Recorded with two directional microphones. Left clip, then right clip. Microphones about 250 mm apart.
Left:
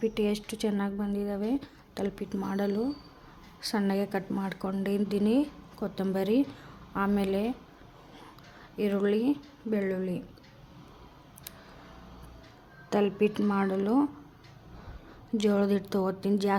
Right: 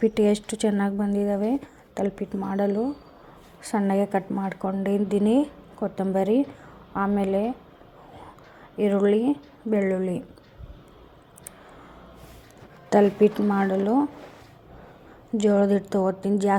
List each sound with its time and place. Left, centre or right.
0.0 s a woman's voice: centre
8.8 s speech: centre
12.9 s speech: centre
15.4 s a woman's voice: centre